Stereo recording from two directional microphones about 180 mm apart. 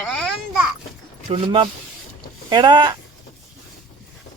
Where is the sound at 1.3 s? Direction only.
30° right (ahead or behind).